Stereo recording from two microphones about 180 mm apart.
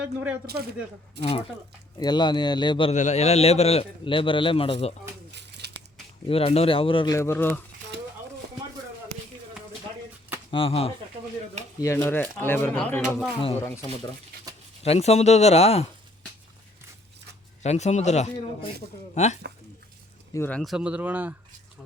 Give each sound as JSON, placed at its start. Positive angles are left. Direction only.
{"t": 0.0, "sound": "speech", "side_deg": -5}
{"t": 1.2, "sound": "speech", "side_deg": -70}
{"t": 2.0, "sound": "speech", "side_deg": 25}
{"t": 2.9, "sound": "a man's voice", "side_deg": 40}
{"t": 5.3, "sound": "crumpling", "side_deg": -70}
{"t": 6.2, "sound": "speech", "side_deg": 35}
{"t": 10.5, "sound": "a man's voice", "side_deg": 30}
{"t": 11.8, "sound": "speech", "side_deg": 15}
{"t": 14.5, "sound": "a sound", "side_deg": -20}
{"t": 14.8, "sound": "a man's voice", "side_deg": 35}
{"t": 17.6, "sound": "a man's voice", "side_deg": 40}
{"t": 20.3, "sound": "speech", "side_deg": 10}
{"t": 20.6, "sound": "speech", "side_deg": 0}